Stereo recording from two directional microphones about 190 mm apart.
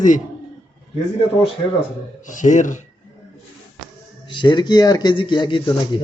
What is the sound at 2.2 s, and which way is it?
Speech, 40° left (ahead or behind).